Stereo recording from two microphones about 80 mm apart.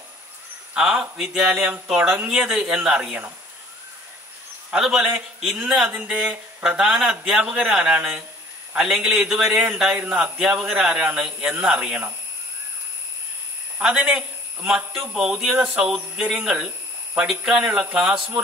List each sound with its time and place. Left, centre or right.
0.7 s speech: centre
4.6 s a man's voice: centre
9.9 s speech: right
13.7 s a man's voice: centre